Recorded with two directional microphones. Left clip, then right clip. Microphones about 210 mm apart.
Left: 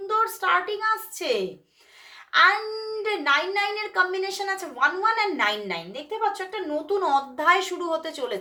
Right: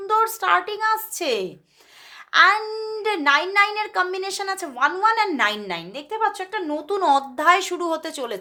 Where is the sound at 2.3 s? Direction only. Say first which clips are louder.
Right 3 dB; 45° right (ahead or behind).